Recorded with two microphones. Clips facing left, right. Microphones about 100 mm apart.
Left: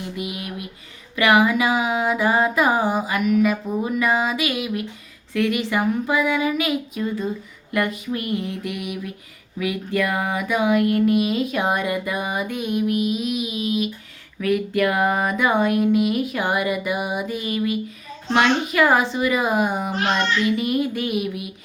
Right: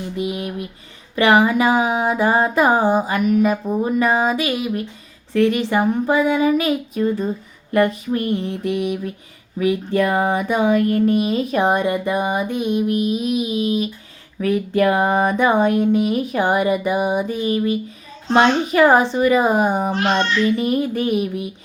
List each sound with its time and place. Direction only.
0.2 s speech: 30° right (ahead or behind)